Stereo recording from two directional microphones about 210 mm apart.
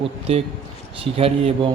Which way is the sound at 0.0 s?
30° right (ahead or behind).